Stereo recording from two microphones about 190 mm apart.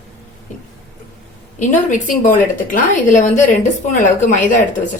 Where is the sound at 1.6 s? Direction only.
40° left (ahead or behind).